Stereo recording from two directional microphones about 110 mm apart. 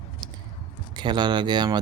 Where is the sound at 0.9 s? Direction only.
40° right (ahead or behind).